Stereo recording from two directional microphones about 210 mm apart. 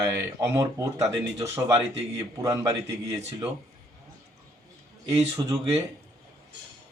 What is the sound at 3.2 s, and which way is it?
Speech, 30° right (ahead or behind).